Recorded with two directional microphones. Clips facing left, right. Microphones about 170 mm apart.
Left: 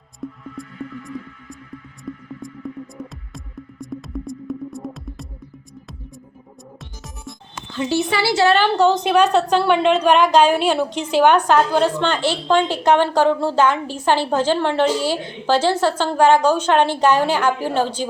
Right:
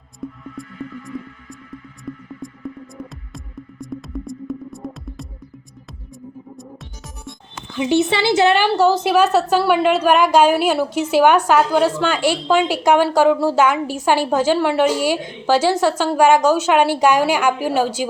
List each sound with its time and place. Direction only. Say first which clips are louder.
0.2 s music: even; centre (ahead or behind)
2.1 s music: even; centre (ahead or behind)
7.7 s a woman's voice: right 3 dB; 15° right (ahead or behind)